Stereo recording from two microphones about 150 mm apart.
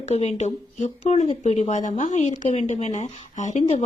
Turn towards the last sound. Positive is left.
turn(degrees=45)  # may be behind; listen again after turning